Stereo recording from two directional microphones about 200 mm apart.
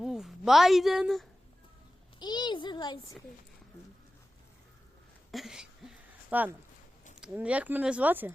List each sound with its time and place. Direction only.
0.0 s a woman's voice: centre (ahead or behind)
2.1 s a child's voice: 20° left (ahead or behind)
5.3 s speech: centre (ahead or behind)